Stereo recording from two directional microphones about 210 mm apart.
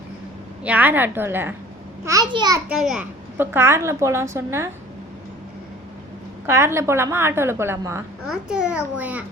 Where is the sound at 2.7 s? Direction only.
5° right (ahead or behind).